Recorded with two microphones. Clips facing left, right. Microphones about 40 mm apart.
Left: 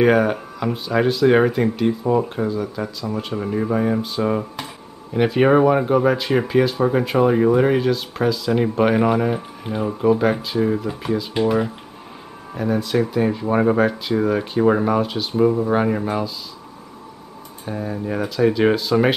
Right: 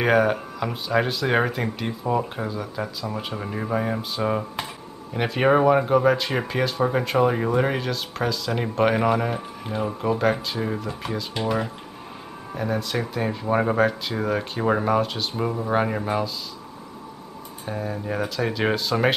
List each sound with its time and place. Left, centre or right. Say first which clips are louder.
0.0 s speech: left 3 dB; centre
17.6 s speech: left 3 dB; centre